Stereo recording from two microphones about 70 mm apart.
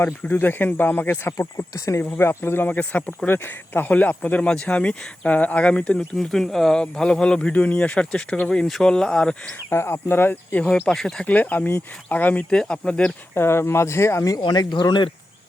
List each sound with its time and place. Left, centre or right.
0.2 s speech: left
1.4 s speech: left
2.0 s a man's voice: left; by 9.3 s centre
9.6 s a man's voice: left
10.6 s speech: centre
11.3 s speech: left
12.5 s speech: centre
13.3 s a man's voice: left
14.3 s speech: left